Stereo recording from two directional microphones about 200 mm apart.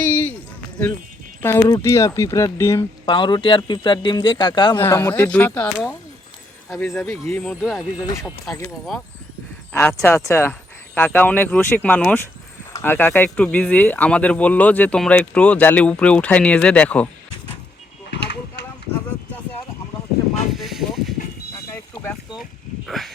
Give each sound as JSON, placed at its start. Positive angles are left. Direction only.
{"t": 0.0, "sound": "a sound", "side_deg": 10}
{"t": 1.4, "sound": "speech", "side_deg": 10}
{"t": 4.8, "sound": "speech", "side_deg": 10}
{"t": 8.0, "sound": "speech", "side_deg": 15}
{"t": 8.4, "sound": "speech", "side_deg": 5}
{"t": 20.6, "sound": "speech", "side_deg": 0}
{"t": 21.5, "sound": "vehicle", "side_deg": 15}
{"t": 22.9, "sound": "dog", "side_deg": 0}